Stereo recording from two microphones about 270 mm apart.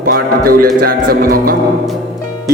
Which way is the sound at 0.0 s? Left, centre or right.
Right.